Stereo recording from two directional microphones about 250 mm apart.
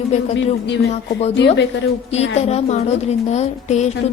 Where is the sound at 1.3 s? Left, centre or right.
Left.